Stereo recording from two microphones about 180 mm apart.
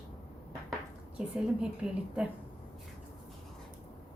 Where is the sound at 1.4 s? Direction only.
5° right (ahead or behind).